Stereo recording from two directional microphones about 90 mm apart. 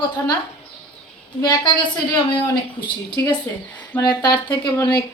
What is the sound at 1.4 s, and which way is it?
Speech, 50° left (ahead or behind).